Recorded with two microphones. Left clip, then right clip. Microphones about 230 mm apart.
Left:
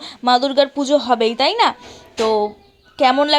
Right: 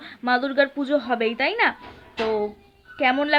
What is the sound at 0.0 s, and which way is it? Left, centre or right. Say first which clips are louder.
A woman's voice: left 7 dB; centre.